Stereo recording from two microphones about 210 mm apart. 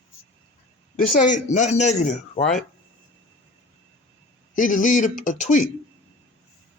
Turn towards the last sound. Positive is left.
turn(degrees=35)  # may be behind; listen again after turning